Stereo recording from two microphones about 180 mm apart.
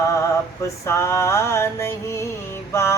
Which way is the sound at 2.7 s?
15° left (ahead or behind).